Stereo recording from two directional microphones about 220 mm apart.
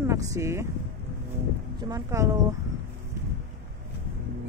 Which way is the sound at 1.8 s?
15° right (ahead or behind).